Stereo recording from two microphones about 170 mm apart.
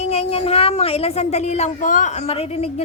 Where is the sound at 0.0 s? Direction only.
35° left (ahead or behind).